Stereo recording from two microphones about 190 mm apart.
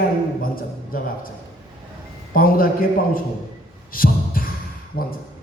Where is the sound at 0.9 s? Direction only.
50° left (ahead or behind).